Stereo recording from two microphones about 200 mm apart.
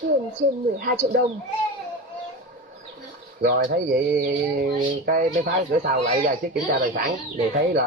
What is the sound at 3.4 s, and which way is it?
Speech, 50° right (ahead or behind).